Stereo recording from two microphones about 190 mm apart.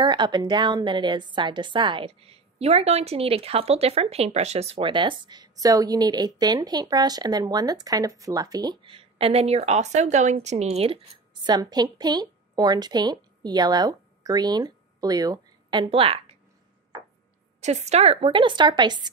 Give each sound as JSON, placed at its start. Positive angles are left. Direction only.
{"t": 0.0, "sound": "a woman's voice", "side_deg": -25}
{"t": 11.4, "sound": "a woman's voice", "side_deg": -20}
{"t": 17.6, "sound": "a woman's voice", "side_deg": -35}